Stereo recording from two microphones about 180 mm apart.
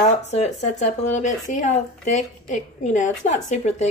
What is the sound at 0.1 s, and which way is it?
Speech, 40° left (ahead or behind).